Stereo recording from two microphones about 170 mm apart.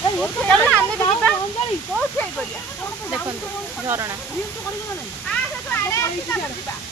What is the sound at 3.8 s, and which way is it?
Speech, 15° right (ahead or behind).